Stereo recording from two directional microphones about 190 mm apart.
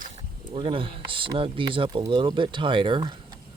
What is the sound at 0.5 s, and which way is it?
Speech, 30° right (ahead or behind).